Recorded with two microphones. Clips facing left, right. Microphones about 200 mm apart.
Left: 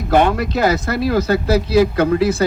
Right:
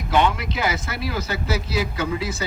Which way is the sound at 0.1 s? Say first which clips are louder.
Left 6 dB; 55° left (ahead or behind).